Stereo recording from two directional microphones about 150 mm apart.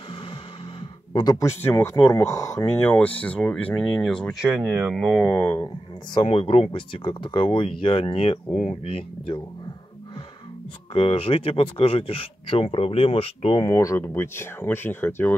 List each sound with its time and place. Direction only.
1.1 s speech: 25° left (ahead or behind); by 4.5 s 5° left (ahead or behind)
4.5 s speech: 10° right (ahead or behind)
4.9 s speech: centre (ahead or behind)
6.1 s speech: 40° left (ahead or behind)
8.5 s speech: 5° left (ahead or behind)
8.8 s speech: 40° left (ahead or behind)
10.9 s speech: 40° left (ahead or behind)
13.7 s speech: 20° left (ahead or behind)